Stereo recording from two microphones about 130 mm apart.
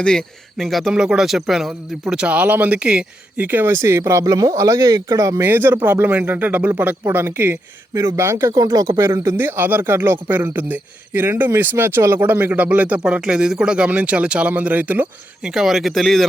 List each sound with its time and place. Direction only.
0.0 s speech: 5° left (ahead or behind); by 15.0 s 15° right (ahead or behind)
15.4 s speech: 5° right (ahead or behind)